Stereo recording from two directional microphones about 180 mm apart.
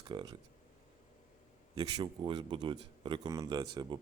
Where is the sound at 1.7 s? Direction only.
25° right (ahead or behind).